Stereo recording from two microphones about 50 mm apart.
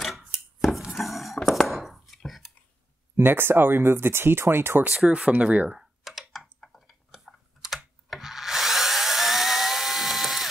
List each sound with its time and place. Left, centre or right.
0.3 s chopping: centre
3.2 s speech: right
4.9 s speech: right
6.0 s typing: centre
7.6 s drill: centre